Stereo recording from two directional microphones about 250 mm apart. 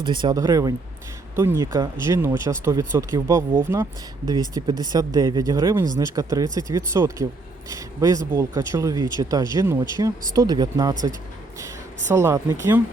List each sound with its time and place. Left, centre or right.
0.0 s speech: centre
12.0 s speech: centre